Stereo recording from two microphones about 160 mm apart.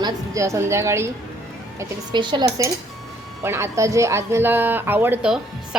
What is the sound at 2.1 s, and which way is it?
Dishes, 30° right (ahead or behind).